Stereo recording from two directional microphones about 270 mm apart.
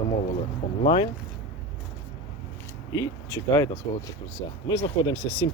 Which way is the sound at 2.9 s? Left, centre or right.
Centre.